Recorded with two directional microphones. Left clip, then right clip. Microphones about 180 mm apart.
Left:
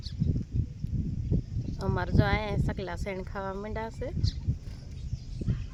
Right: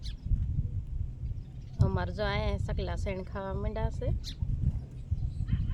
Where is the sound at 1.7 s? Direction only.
35° left (ahead or behind).